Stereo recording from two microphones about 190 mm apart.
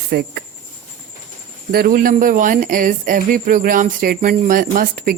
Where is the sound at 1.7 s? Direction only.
50° right (ahead or behind).